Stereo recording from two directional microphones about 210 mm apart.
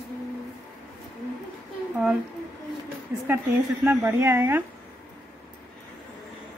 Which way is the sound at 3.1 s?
10° right (ahead or behind).